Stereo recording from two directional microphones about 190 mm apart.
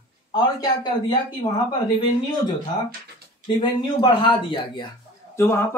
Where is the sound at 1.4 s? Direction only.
20° left (ahead or behind).